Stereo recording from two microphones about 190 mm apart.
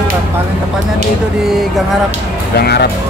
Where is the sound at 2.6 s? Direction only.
60° left (ahead or behind).